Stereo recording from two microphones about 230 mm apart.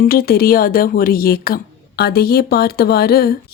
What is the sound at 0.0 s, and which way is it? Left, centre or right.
A woman's voice, left.